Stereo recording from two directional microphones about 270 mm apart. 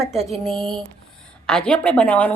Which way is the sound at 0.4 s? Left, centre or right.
Centre.